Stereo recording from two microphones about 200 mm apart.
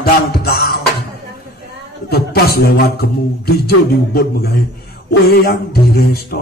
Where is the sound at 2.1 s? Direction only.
50° left (ahead or behind).